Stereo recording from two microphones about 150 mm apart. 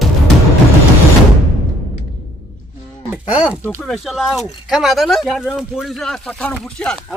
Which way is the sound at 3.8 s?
Centre (ahead or behind).